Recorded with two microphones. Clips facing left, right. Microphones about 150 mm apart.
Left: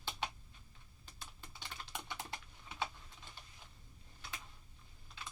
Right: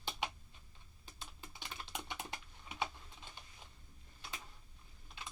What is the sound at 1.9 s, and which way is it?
Typing, 20° right (ahead or behind).